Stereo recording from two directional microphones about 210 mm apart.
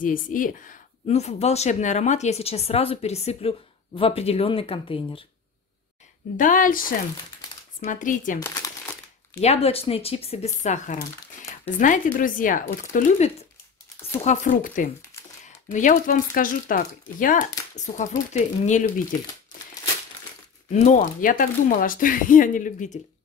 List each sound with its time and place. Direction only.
0.0 s speech: 40° left (ahead or behind)
6.3 s speech: 40° left (ahead or behind)
8.4 s crumpling: 15° left (ahead or behind)
9.4 s speech: 30° left (ahead or behind)
20.7 s speech: 35° left (ahead or behind)